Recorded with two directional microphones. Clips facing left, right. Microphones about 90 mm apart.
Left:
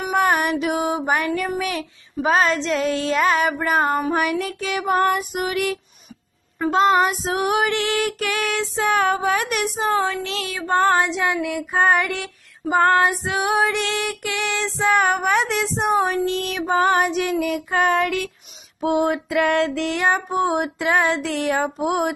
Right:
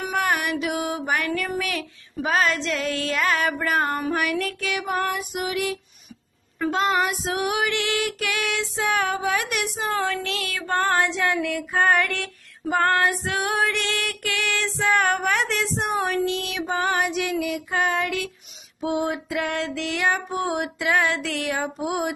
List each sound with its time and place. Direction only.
0.1 s female singing: 30° left (ahead or behind)
4.6 s female singing: 35° left (ahead or behind)
4.9 s music: 50° left (ahead or behind)
6.6 s female singing: 30° left (ahead or behind)
9.8 s female singing: 25° left (ahead or behind)
16.3 s music: 40° left (ahead or behind)
18.8 s female singing: 60° left (ahead or behind); by 21.5 s 30° left (ahead or behind)
21.5 s music: 55° left (ahead or behind)